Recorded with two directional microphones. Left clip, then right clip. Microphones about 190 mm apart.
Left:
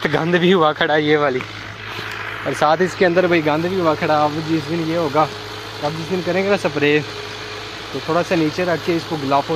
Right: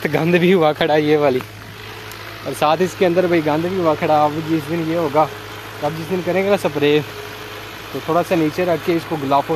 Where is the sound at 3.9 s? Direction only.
5° right (ahead or behind).